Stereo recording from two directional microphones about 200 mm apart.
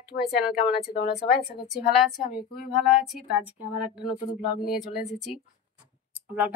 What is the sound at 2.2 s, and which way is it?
Speech, 45° left (ahead or behind).